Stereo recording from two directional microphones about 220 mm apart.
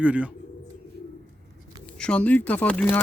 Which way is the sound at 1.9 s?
5° left (ahead or behind).